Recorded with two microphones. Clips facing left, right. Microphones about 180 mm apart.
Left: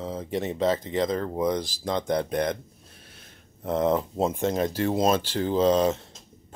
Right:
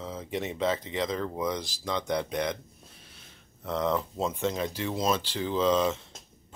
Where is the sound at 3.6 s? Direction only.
50° left (ahead or behind).